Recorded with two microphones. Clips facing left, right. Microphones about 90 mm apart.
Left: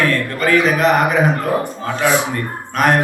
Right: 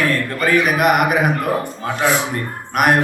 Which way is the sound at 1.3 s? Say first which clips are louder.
Left 1 dB; 20° left (ahead or behind).